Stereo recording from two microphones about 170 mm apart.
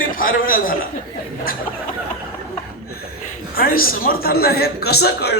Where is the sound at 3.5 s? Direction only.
60° left (ahead or behind).